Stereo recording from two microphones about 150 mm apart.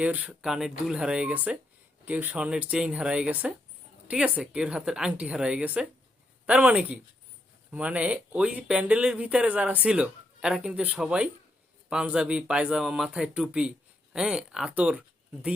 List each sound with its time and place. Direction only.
0.0 s speech: 10° right (ahead or behind)